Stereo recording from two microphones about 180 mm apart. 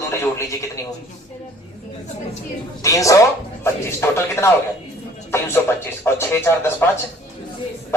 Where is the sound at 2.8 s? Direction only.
20° left (ahead or behind).